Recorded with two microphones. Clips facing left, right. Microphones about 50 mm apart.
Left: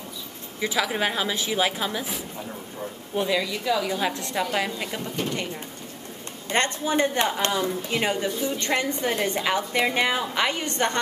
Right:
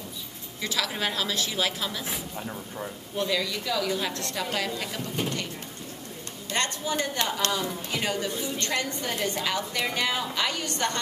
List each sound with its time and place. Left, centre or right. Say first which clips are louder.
0.6 s a woman's voice: left 5 dB; centre
3.2 s a woman's voice: left 3 dB; centre
6.5 s a woman's voice: left 5 dB; left